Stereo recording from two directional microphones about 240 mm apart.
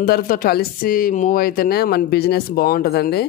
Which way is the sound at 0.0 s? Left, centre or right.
Left.